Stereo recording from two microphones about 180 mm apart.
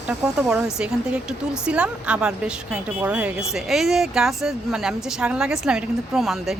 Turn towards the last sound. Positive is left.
turn(degrees=0)  # may be behind; listen again after turning